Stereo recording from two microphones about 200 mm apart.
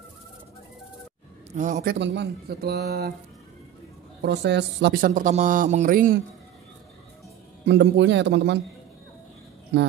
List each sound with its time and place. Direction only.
1.5 s a man's voice: 40° right (ahead or behind)
2.0 s speech: 60° right (ahead or behind)
4.2 s speech: 60° right (ahead or behind); by 6.1 s 45° right (ahead or behind)
7.6 s speech: 60° right (ahead or behind)
9.7 s speech: 60° right (ahead or behind)